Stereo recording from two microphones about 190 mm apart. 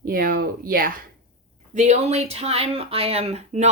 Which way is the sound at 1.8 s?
35° right (ahead or behind).